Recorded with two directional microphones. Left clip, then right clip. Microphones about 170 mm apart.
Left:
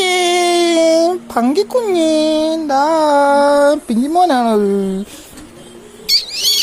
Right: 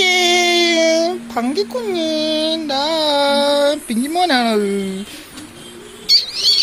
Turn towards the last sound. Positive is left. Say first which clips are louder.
# right 1 dB
turn(degrees=50)  # may be behind; listen again after turning